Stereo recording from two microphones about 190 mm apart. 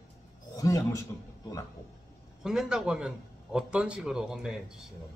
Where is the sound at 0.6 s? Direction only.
15° left (ahead or behind).